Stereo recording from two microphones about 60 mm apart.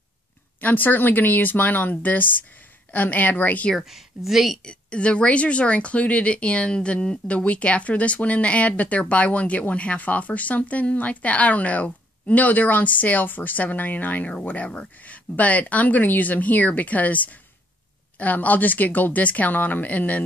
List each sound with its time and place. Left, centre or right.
0.6 s speech: left
3.7 s speech: centre
4.6 s speech: centre